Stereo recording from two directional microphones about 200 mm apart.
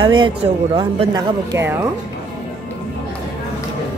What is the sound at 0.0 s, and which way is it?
Speech, 25° right (ahead or behind).